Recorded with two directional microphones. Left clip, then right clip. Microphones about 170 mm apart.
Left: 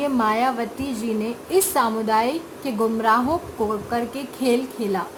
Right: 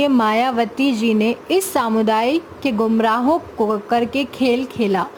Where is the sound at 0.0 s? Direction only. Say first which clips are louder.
Right 4 dB; 50° right (ahead or behind).